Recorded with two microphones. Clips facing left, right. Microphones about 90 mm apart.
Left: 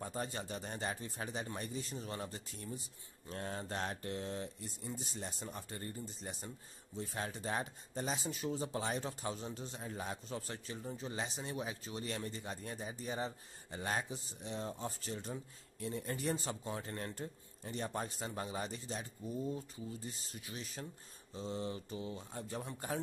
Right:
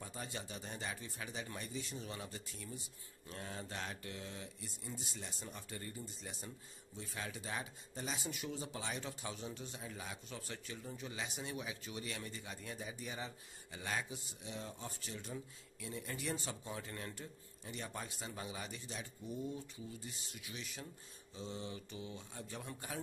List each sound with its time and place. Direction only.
0.0 s speech: 40° left (ahead or behind)